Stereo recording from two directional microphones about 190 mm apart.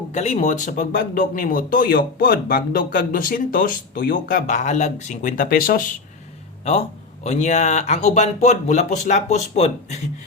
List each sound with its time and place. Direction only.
0.1 s speech: 35° left (ahead or behind)
7.3 s speech: 35° left (ahead or behind)